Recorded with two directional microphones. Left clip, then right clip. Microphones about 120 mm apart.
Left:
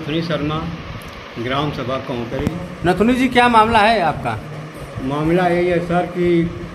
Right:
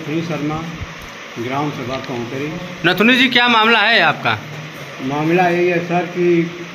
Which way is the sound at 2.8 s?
10° left (ahead or behind).